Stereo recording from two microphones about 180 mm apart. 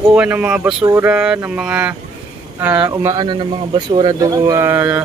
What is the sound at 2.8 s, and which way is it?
Speech, 20° right (ahead or behind).